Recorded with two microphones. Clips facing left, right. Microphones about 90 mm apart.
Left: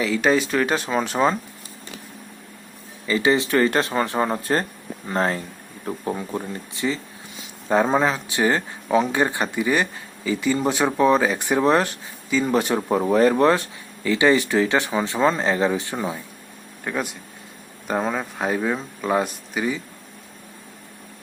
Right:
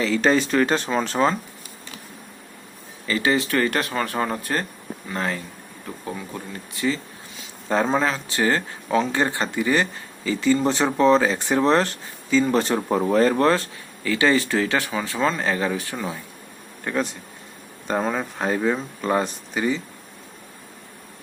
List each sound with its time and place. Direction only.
0.0 s speech: 10° left (ahead or behind)
3.1 s speech: 20° left (ahead or behind)
5.0 s speech: 30° left (ahead or behind)
16.8 s speech: 5° left (ahead or behind)